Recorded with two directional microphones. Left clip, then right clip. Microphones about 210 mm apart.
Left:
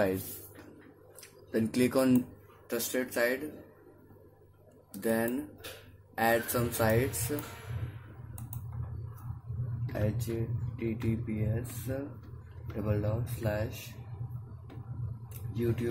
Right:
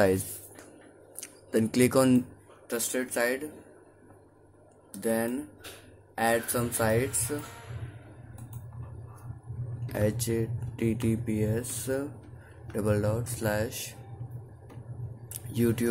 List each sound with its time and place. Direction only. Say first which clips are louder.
1.2 s speech: right 4 dB; 20° right (ahead or behind)
4.9 s speech: right 1 dB; 10° right (ahead or behind)
10.0 s speech: right 8 dB; 35° right (ahead or behind)
15.5 s speech: right 5 dB; 35° right (ahead or behind)